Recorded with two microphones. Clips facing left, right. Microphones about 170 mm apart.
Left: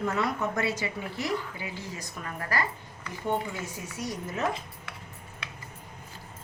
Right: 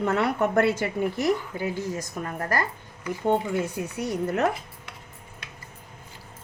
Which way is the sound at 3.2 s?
60° right (ahead or behind).